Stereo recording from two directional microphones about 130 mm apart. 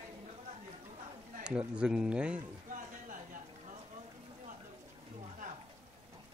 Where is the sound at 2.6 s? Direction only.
85° right.